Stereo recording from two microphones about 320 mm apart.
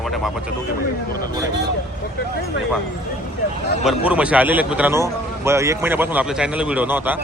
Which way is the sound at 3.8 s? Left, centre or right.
Centre.